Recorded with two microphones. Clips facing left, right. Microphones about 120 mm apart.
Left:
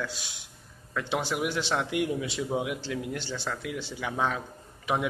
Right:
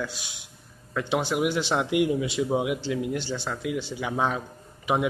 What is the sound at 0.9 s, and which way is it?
A man's voice, centre (ahead or behind).